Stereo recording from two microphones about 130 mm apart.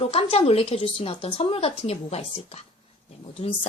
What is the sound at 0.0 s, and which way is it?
Speech, 50° left (ahead or behind).